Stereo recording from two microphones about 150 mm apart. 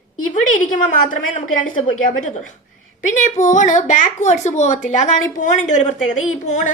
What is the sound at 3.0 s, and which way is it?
A woman's voice, 55° left (ahead or behind).